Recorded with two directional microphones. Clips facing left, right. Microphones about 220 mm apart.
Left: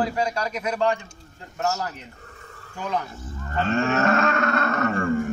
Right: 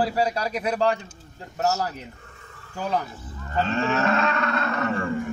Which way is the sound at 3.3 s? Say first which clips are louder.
Left 1 dB; 45° left (ahead or behind).